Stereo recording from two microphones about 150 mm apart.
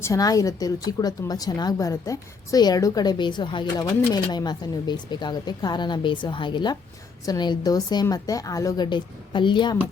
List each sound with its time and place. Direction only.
0.0 s speech: 20° left (ahead or behind)